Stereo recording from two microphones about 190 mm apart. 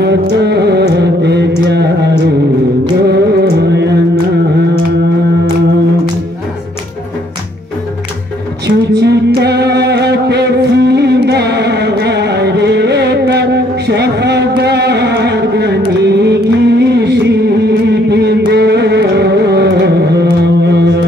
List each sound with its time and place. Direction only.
0.0 s music: 60° right (ahead or behind)
8.6 s a sound: 60° right (ahead or behind)
18.5 s music: 60° right (ahead or behind)